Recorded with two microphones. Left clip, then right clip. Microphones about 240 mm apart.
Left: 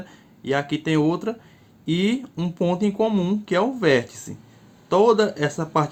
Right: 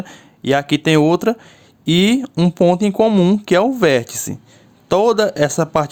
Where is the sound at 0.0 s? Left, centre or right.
Right.